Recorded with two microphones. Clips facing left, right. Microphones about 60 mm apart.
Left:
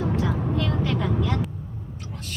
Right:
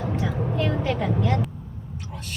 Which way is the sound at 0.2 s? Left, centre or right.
Right.